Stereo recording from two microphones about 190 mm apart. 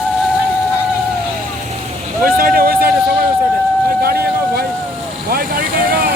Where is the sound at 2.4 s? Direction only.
50° right (ahead or behind).